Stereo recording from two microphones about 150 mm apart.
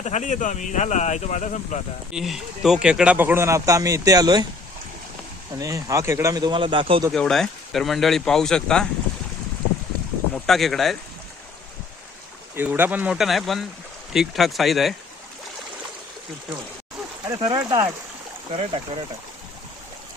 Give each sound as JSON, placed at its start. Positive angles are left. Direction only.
{"t": 0.0, "sound": "speech", "side_deg": 50}
{"t": 2.1, "sound": "speech", "side_deg": -5}
{"t": 5.5, "sound": "speech", "side_deg": -20}
{"t": 7.1, "sound": "speech", "side_deg": 0}
{"t": 10.3, "sound": "speech", "side_deg": 0}
{"t": 12.5, "sound": "speech", "side_deg": -15}
{"t": 17.7, "sound": "speech", "side_deg": -25}
{"t": 18.5, "sound": "speech", "side_deg": -40}